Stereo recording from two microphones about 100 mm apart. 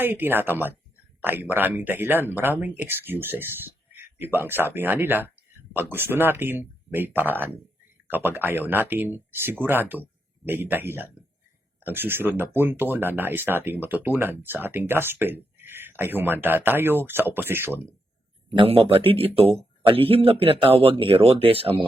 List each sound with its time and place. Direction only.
0.0 s speech: 20° right (ahead or behind)
18.5 s speech: 65° right (ahead or behind)